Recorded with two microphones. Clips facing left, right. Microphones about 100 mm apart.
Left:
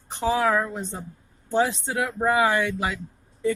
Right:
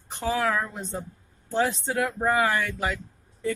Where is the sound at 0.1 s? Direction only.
20° left (ahead or behind).